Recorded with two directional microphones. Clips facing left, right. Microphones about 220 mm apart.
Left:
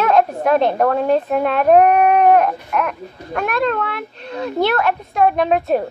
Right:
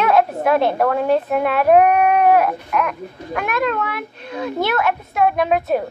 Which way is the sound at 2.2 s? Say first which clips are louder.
Left 2 dB; 5° right (ahead or behind).